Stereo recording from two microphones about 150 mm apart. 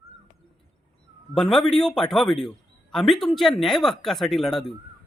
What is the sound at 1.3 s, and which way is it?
A man's voice, 5° left (ahead or behind).